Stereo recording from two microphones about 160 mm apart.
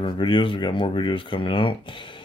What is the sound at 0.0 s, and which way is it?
Speech, 30° left (ahead or behind).